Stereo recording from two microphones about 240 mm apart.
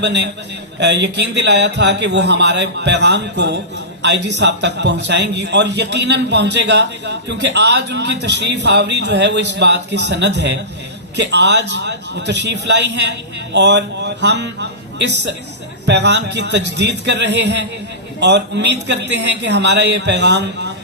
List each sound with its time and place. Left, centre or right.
0.0 s a man's voice: right